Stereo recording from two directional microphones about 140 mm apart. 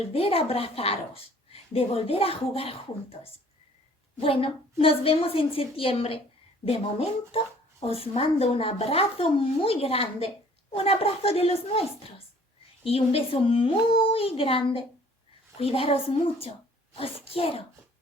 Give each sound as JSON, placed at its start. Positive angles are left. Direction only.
{"t": 0.1, "sound": "speech", "side_deg": 45}
{"t": 4.2, "sound": "a woman's voice", "side_deg": 40}